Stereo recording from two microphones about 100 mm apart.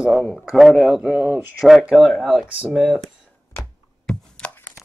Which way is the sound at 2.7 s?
10° right (ahead or behind).